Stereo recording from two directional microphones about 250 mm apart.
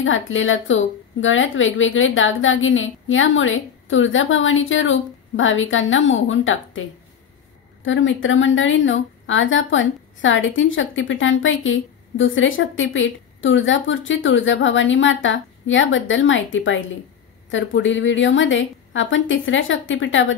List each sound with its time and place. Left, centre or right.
0.0 s a woman's voice: left